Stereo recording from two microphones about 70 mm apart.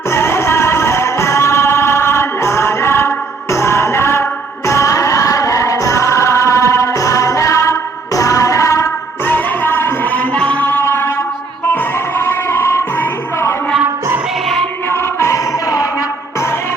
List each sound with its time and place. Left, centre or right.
0.1 s music: left
9.2 s music: left
10.3 s music: centre
14.8 s music: left